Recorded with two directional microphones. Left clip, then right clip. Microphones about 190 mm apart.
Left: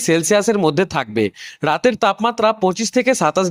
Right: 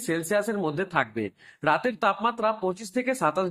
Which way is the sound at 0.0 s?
50° left (ahead or behind).